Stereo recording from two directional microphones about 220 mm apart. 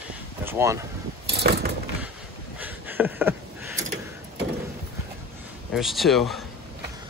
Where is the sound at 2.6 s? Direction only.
10° right (ahead or behind).